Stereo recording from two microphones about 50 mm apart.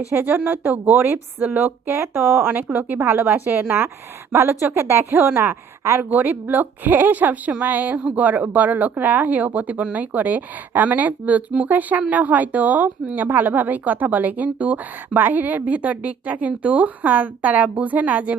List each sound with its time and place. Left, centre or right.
0.1 s a woman's voice: right
2.7 s a woman's voice: right
4.3 s a woman's voice: right
6.0 s a woman's voice: right